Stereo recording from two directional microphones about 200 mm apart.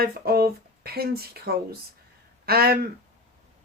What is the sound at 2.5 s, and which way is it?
Speech, 50° right (ahead or behind).